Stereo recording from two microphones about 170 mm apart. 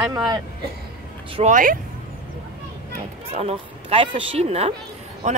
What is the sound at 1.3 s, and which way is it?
Speech, 45° right (ahead or behind).